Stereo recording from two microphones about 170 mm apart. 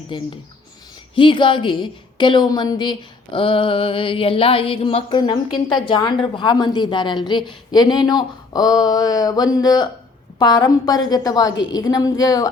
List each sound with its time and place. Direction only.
0.1 s a woman's voice: 25° left (ahead or behind)